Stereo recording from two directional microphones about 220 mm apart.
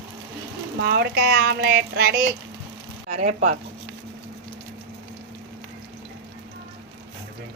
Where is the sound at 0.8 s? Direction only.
45° right (ahead or behind).